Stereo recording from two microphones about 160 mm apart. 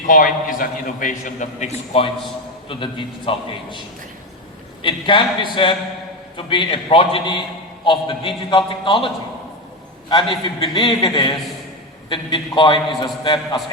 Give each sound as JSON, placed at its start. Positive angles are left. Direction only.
{"t": 0.1, "sound": "a man's voice", "side_deg": 60}
{"t": 10.1, "sound": "a man's voice", "side_deg": 30}